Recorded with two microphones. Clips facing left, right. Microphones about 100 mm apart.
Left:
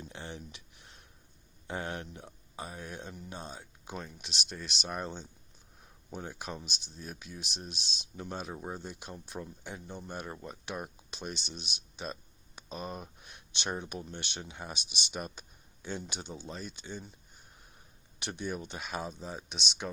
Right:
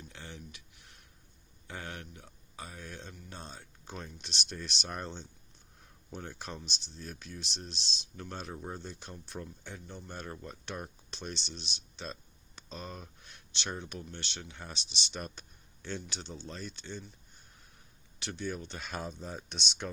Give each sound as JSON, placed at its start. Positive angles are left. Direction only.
{"t": 0.1, "sound": "a sound", "side_deg": 25}
{"t": 1.6, "sound": "speech", "side_deg": 25}
{"t": 18.2, "sound": "speech", "side_deg": 20}